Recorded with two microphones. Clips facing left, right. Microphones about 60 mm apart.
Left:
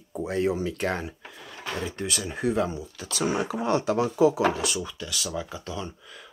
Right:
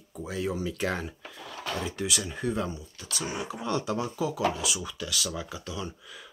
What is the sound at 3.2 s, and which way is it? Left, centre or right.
Speech, left.